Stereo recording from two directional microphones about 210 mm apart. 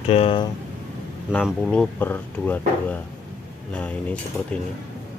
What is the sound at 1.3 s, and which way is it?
Speech, 5° left (ahead or behind).